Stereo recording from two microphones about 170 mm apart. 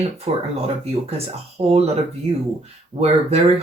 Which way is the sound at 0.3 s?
35° right (ahead or behind).